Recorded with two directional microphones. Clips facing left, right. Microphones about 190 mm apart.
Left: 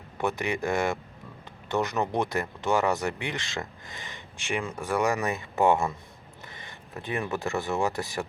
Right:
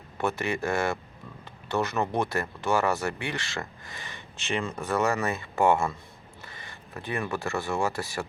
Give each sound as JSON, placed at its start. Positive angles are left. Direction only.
{"t": 0.2, "sound": "speech", "side_deg": 15}